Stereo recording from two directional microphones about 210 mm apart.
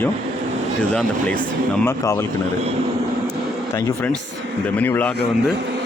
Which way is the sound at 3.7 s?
10° left (ahead or behind).